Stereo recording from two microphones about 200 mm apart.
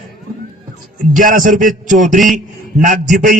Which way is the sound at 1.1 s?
40° right (ahead or behind).